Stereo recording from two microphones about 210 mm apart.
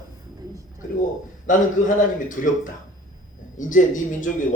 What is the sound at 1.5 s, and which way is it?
Speech, 40° left (ahead or behind).